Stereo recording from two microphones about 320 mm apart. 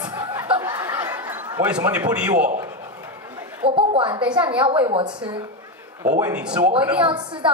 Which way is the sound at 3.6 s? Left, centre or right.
Centre.